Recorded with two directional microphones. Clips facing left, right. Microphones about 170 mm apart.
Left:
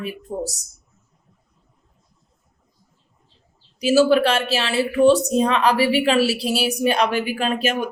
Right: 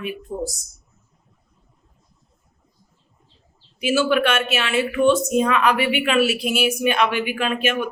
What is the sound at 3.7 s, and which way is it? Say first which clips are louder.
A woman's voice: left 4 dB; 35° left (ahead or behind).